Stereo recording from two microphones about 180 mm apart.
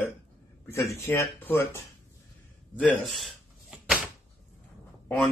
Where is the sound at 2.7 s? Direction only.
5° left (ahead or behind).